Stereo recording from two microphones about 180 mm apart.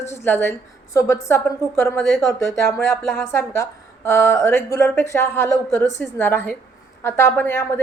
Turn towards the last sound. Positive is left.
turn(degrees=15)  # may be behind; listen again after turning